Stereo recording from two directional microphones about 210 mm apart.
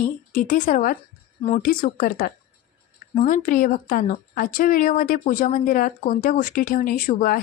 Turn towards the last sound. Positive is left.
turn(degrees=40)  # may be behind; listen again after turning